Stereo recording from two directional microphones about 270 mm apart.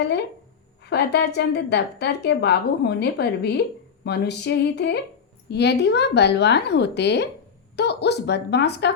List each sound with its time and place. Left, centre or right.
0.0 s a woman's voice: left